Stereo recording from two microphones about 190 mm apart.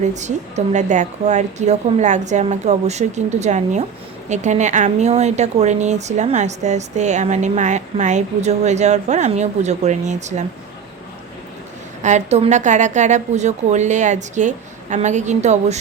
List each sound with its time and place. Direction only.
0.0 s speech: 40° right (ahead or behind)
12.0 s speech: 35° right (ahead or behind)